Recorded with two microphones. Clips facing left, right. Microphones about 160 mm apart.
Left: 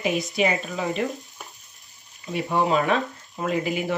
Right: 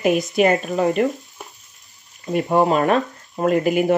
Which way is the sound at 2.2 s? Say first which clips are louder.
Right 6 dB; 40° right (ahead or behind).